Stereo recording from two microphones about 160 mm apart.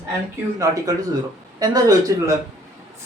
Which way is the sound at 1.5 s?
25° right (ahead or behind).